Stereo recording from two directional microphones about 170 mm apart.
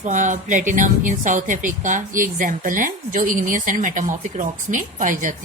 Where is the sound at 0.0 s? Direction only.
45° right (ahead or behind).